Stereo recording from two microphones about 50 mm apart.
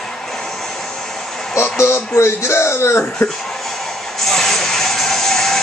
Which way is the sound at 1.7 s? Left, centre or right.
Left.